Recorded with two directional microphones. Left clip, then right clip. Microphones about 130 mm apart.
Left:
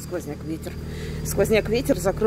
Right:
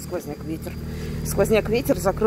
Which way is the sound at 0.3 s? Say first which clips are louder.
Even; 15° left (ahead or behind).